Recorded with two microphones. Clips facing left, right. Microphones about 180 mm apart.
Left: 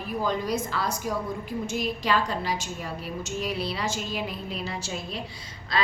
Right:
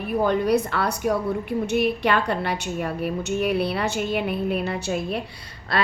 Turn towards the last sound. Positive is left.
turn(degrees=-60)  # may be behind; listen again after turning